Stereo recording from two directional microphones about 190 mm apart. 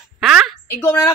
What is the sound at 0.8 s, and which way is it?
Speech, 15° left (ahead or behind).